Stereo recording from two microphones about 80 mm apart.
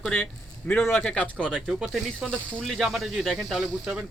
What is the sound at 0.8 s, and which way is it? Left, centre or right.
Speech, left.